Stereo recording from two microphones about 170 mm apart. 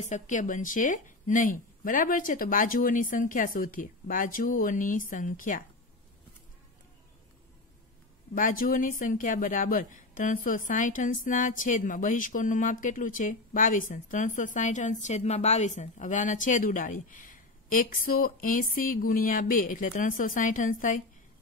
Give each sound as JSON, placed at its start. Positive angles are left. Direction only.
{"t": 0.0, "sound": "speech", "side_deg": 45}
{"t": 8.4, "sound": "speech", "side_deg": 55}